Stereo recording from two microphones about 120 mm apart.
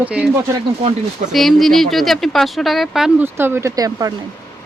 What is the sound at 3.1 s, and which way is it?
Speech, 20° right (ahead or behind).